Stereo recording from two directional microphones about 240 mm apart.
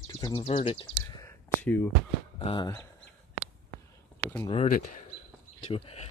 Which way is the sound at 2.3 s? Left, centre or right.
Left.